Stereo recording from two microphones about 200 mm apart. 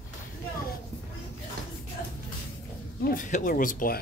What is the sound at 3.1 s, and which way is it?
Speech, 45° left (ahead or behind).